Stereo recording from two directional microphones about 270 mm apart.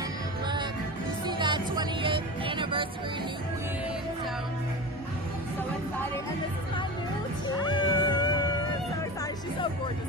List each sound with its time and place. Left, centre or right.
1.2 s music: centre
7.4 s cat: centre